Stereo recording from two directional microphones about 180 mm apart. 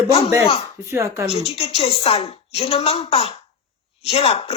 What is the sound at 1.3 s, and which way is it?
Speech, 35° left (ahead or behind).